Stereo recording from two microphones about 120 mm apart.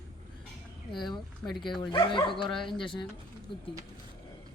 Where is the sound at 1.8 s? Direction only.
40° left (ahead or behind).